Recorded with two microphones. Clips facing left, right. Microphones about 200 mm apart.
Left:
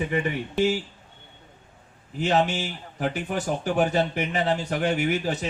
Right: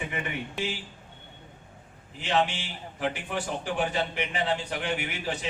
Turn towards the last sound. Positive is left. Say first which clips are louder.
# left 7 dB
turn(degrees=40)  # may be behind; listen again after turning